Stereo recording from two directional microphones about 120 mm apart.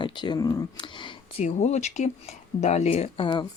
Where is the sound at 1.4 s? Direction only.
75° left (ahead or behind).